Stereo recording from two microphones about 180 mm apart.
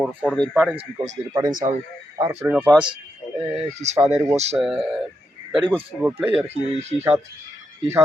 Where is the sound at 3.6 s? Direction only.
40° right (ahead or behind).